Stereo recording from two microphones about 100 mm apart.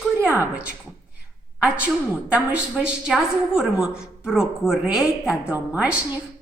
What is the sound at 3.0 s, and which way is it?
A woman's voice, 5° right (ahead or behind).